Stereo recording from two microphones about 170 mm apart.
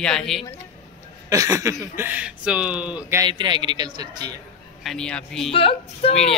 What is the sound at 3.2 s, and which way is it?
A man's voice, 25° right (ahead or behind).